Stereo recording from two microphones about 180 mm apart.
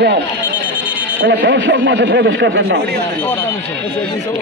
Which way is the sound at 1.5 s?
80° right.